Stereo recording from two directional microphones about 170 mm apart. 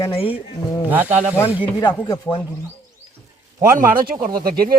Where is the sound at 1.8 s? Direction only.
25° left (ahead or behind).